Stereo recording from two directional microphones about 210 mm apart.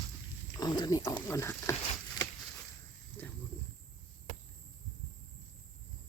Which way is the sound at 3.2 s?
10° left (ahead or behind).